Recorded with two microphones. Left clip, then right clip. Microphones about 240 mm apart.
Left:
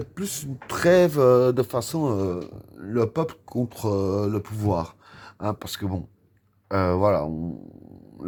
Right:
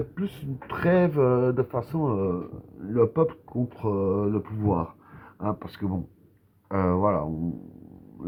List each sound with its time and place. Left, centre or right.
0.2 s speech: left